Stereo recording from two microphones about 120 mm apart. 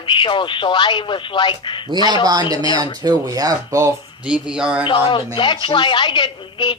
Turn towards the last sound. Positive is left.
turn(degrees=40)  # may be behind; listen again after turning